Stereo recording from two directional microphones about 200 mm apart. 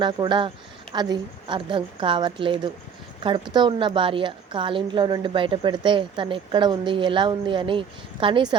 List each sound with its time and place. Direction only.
0.0 s a woman's voice: 25° right (ahead or behind)